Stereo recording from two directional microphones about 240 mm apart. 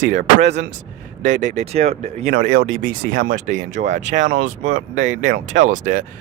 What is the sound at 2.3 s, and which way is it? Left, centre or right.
Speech, right.